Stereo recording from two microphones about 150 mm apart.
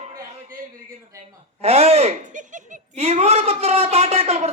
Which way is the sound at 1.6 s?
45° right (ahead or behind).